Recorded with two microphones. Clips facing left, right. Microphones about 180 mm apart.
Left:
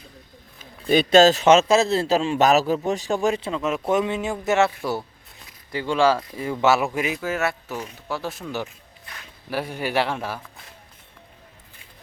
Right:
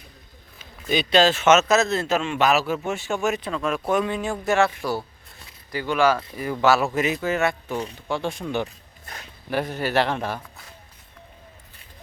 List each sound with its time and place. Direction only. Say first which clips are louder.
0.9 s a man's voice: left 4 dB; 45° left (ahead or behind); by 8.6 s 5° left (ahead or behind)
8.6 s a sound: right 2 dB; 45° right (ahead or behind)
9.5 s speech: right 2 dB; 10° left (ahead or behind)